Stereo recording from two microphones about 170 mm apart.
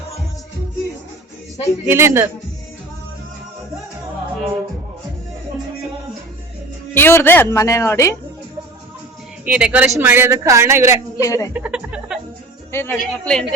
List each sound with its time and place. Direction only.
1.9 s a woman's voice: 15° right (ahead or behind)
6.9 s speech: 15° left (ahead or behind)
9.5 s a woman's voice: 5° right (ahead or behind)
11.2 s speech: 20° left (ahead or behind)
11.5 s music: 5° right (ahead or behind)
12.7 s speech: 10° left (ahead or behind)